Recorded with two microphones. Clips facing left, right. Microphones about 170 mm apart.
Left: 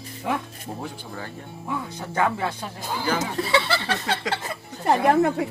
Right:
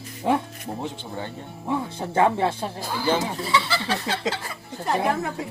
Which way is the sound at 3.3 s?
65° left (ahead or behind).